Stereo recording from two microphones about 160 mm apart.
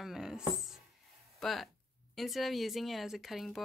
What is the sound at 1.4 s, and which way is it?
Speech, centre (ahead or behind).